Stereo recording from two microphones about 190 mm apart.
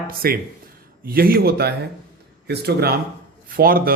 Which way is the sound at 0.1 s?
50° right (ahead or behind).